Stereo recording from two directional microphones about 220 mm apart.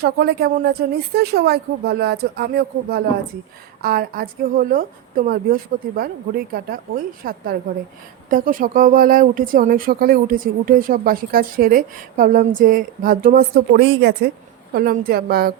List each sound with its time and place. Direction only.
0.0 s speech: 45° right (ahead or behind)